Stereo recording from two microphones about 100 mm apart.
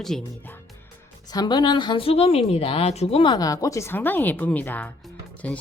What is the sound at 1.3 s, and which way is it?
Speech, 40° left (ahead or behind).